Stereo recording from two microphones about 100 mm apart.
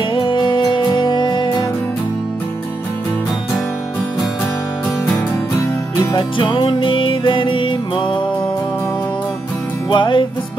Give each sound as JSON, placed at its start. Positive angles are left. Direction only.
{"t": 0.1, "sound": "music", "side_deg": 55}
{"t": 6.1, "sound": "music", "side_deg": 55}
{"t": 9.8, "sound": "music", "side_deg": 55}